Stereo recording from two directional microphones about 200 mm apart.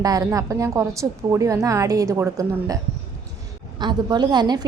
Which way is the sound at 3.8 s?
20° right (ahead or behind).